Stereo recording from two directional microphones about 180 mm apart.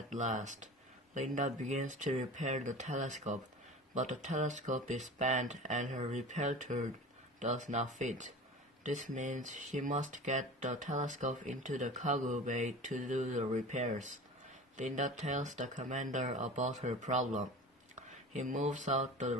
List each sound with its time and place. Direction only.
0.1 s speech: 45° right (ahead or behind)